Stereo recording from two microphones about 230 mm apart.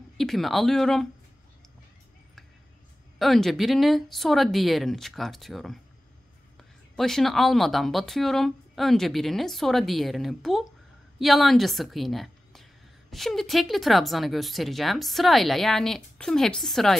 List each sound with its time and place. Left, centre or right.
0.2 s speech: centre
3.2 s speech: centre
7.0 s a woman's voice: centre